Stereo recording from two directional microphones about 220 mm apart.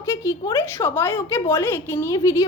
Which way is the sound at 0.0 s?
15° left (ahead or behind).